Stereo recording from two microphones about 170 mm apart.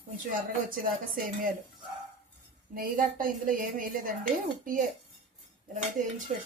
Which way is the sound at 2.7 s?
55° right (ahead or behind).